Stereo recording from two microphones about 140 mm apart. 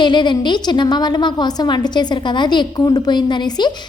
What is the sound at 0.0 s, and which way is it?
A woman's voice, 35° left (ahead or behind).